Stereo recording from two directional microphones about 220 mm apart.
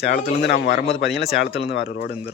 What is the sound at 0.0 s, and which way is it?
Speech, 45° left (ahead or behind).